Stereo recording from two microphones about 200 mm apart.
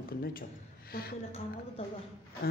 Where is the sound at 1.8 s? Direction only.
30° left (ahead or behind).